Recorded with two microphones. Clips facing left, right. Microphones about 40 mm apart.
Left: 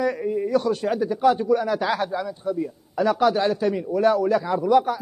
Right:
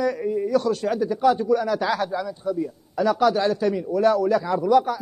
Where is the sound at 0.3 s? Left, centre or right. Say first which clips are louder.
Right 1 dB; centre.